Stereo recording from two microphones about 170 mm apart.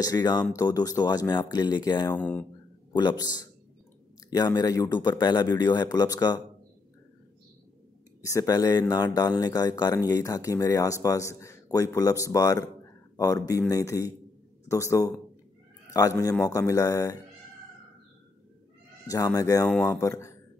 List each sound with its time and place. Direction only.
0.0 s speech: 25° left (ahead or behind)
2.0 s speech: 10° left (ahead or behind)
2.9 s speech: 25° left (ahead or behind)
8.2 s speech: 20° left (ahead or behind)
19.0 s speech: 20° left (ahead or behind)
19.7 s speech: 10° left (ahead or behind)